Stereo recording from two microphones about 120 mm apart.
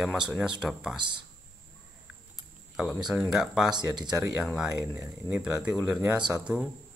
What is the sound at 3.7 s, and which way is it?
Speech, 35° right (ahead or behind).